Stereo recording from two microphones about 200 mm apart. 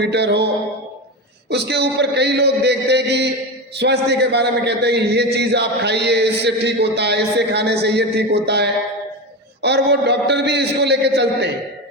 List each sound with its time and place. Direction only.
0.0 s a man's voice: 55° right (ahead or behind)